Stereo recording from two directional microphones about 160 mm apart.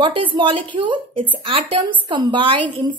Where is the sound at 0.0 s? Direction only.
30° right (ahead or behind).